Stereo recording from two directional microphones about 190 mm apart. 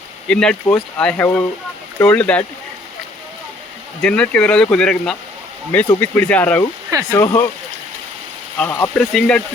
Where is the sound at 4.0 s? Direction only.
5° left (ahead or behind).